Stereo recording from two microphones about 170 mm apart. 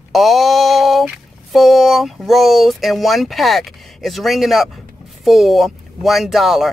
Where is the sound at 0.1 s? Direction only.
Centre (ahead or behind).